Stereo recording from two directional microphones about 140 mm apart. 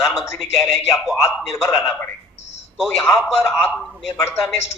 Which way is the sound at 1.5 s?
20° left (ahead or behind).